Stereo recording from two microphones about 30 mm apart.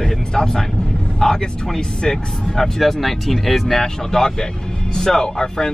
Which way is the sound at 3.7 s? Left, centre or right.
Left.